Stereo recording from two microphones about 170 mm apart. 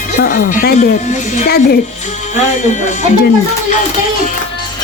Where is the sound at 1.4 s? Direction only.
65° left (ahead or behind).